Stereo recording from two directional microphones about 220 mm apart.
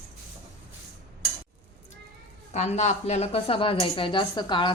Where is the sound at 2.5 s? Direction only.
30° left (ahead or behind).